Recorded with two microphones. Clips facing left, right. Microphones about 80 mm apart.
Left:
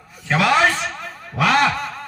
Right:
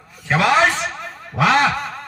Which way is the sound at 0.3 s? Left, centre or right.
Right.